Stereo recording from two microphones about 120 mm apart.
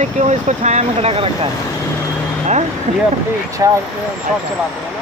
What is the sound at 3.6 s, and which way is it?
Speech, 30° right (ahead or behind).